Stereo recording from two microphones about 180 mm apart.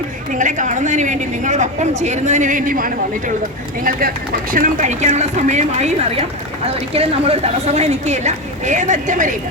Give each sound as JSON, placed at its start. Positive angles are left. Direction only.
{"t": 0.3, "sound": "a woman's voice", "side_deg": -45}
{"t": 4.5, "sound": "a woman's voice", "side_deg": -45}